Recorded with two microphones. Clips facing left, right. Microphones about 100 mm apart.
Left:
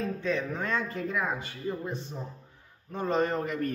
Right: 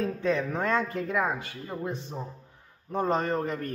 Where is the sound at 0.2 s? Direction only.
55° right (ahead or behind).